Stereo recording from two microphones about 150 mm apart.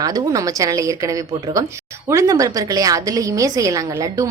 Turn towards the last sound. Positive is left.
turn(degrees=-20)  # may be behind; listen again after turning